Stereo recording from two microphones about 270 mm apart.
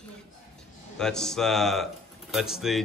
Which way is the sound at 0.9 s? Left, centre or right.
Centre.